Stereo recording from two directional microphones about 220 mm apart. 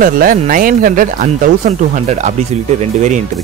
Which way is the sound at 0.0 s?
40° right (ahead or behind).